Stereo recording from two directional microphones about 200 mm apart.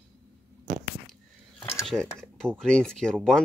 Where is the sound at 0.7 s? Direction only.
55° right (ahead or behind).